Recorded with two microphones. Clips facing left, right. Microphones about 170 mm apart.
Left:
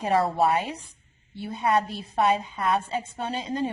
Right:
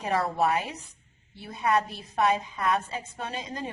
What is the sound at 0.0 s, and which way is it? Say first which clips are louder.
A woman's voice: left 4 dB; 30° left (ahead or behind).